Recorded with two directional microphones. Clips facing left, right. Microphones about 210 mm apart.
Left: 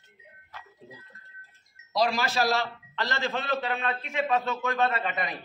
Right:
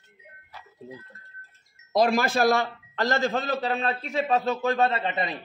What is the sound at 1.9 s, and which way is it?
A man's voice, 50° right (ahead or behind).